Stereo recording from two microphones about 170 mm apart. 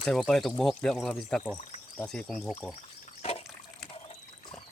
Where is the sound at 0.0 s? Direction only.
Centre (ahead or behind).